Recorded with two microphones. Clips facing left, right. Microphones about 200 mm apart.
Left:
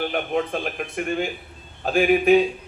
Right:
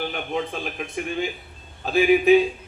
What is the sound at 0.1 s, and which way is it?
A man's voice, 55° left (ahead or behind).